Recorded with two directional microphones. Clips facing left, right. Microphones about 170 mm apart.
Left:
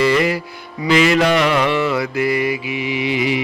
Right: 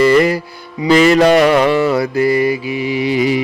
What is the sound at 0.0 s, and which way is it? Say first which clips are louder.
Music: right 5 dB; 45° right (ahead or behind).